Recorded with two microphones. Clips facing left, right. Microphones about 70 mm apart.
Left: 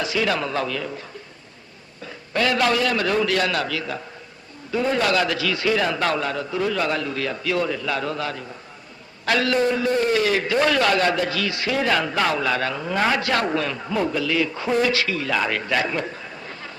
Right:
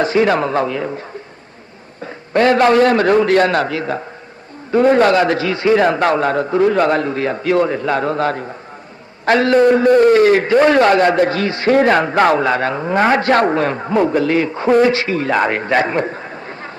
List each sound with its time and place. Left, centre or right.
0.0 s a man's voice: right
2.0 s a man's voice: right
9.6 s a man's voice: right